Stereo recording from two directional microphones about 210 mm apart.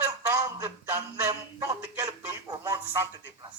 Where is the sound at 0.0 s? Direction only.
10° right (ahead or behind).